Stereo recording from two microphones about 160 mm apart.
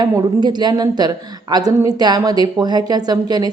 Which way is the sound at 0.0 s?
25° right (ahead or behind).